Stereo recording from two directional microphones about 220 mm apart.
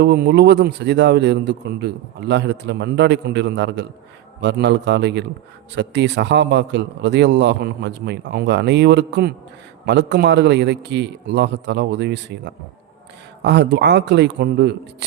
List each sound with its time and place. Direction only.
0.0 s a man's voice: 50° right (ahead or behind)
13.4 s a man's voice: 50° right (ahead or behind)